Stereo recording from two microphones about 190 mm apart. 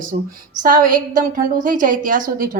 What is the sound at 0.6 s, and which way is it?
A woman's voice, 45° right (ahead or behind).